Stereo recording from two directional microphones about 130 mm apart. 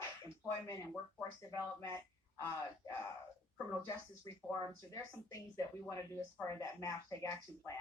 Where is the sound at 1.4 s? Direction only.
25° left (ahead or behind).